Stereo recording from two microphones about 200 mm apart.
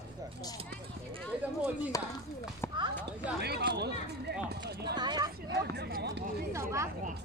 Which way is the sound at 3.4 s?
55° right (ahead or behind).